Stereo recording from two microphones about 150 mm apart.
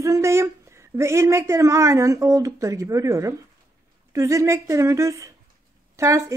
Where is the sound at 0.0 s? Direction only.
20° right (ahead or behind).